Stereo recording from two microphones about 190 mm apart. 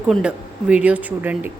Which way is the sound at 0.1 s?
5° right (ahead or behind).